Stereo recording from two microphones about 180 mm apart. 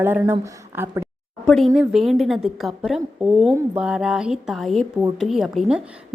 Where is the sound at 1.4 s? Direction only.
Centre (ahead or behind).